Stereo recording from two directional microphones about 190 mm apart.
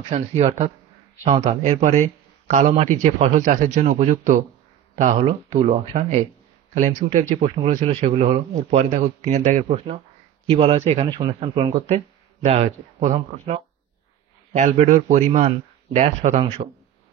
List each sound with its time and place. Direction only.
0.1 s speech: 35° right (ahead or behind)